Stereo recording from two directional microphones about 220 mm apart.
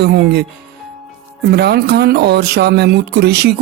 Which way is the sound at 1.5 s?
50° right (ahead or behind).